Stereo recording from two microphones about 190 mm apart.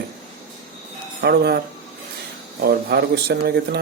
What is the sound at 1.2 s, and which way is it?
Speech, 60° right (ahead or behind).